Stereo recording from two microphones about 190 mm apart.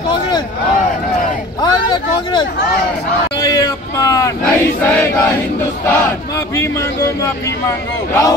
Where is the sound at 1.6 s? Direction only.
25° left (ahead or behind).